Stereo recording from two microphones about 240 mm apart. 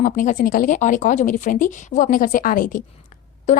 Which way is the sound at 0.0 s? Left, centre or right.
Left.